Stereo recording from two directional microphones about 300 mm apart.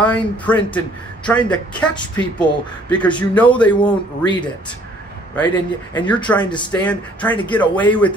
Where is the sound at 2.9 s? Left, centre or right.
Centre.